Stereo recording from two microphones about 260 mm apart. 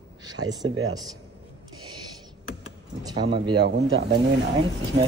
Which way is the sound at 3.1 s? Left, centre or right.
Centre.